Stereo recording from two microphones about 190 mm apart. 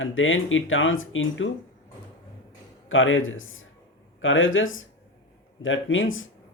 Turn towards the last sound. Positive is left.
turn(degrees=90)